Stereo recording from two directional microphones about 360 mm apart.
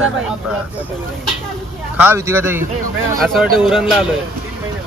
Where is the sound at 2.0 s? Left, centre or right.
Centre.